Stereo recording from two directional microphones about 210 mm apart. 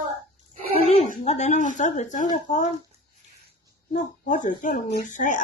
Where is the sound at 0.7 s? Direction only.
30° left (ahead or behind).